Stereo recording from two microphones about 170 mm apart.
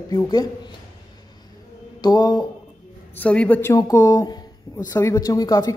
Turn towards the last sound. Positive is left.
turn(degrees=20)  # may be behind; listen again after turning